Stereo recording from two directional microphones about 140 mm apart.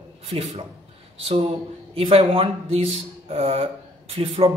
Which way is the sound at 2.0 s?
45° right (ahead or behind).